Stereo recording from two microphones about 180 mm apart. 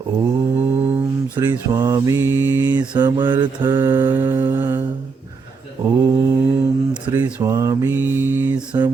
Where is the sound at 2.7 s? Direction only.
25° right (ahead or behind).